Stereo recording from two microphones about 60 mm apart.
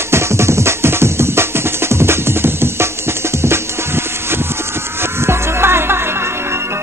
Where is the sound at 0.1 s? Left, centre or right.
Right.